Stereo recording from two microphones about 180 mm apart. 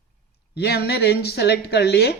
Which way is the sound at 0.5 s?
60° left (ahead or behind).